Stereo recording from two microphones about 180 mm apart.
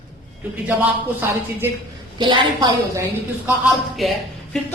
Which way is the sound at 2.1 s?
25° right (ahead or behind).